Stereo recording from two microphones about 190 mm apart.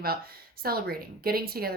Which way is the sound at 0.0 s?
50° right (ahead or behind).